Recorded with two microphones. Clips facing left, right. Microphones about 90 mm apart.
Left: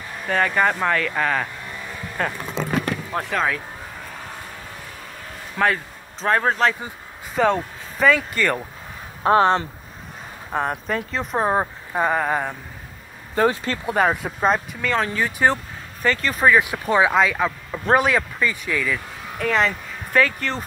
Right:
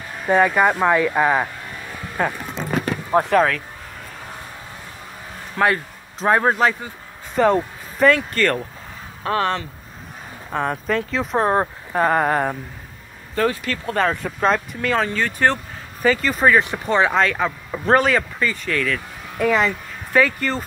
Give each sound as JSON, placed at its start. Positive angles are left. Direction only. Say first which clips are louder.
{"t": 0.3, "sound": "speech", "louder": "right 4 dB", "side_deg": -15}
{"t": 3.2, "sound": "speech", "louder": "right 8 dB", "side_deg": -20}
{"t": 5.6, "sound": "speech", "louder": "right 2 dB", "side_deg": -5}
{"t": 9.2, "sound": "speech", "louder": "left 5 dB", "side_deg": 30}
{"t": 10.5, "sound": "speech", "louder": "right 2 dB", "side_deg": 5}
{"t": 13.3, "sound": "speech", "louder": "left 1 dB", "side_deg": 25}
{"t": 13.8, "sound": "speech", "louder": "left 1 dB", "side_deg": 10}
{"t": 16.0, "sound": "speech", "louder": "right 2 dB", "side_deg": -5}
{"t": 19.3, "sound": "speech", "louder": "right 2 dB", "side_deg": -5}